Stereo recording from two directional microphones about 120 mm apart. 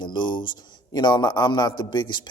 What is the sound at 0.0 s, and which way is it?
Speech, 40° left (ahead or behind).